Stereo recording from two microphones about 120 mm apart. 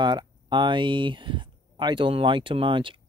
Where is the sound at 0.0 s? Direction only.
40° right (ahead or behind).